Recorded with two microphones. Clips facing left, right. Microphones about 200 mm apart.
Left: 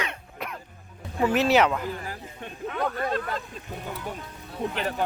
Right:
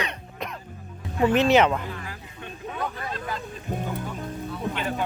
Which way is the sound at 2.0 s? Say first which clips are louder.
Left 2 dB; 40° left (ahead or behind).